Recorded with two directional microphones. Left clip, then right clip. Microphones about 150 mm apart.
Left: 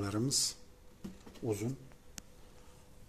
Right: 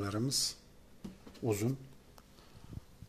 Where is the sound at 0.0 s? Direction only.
Centre (ahead or behind).